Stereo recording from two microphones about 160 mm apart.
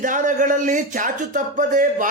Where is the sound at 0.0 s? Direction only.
55° right (ahead or behind).